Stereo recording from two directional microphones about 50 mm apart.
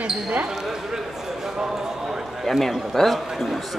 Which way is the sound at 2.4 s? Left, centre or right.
Centre.